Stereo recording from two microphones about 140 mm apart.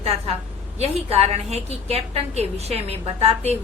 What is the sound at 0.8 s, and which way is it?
A woman's voice, 45° right (ahead or behind).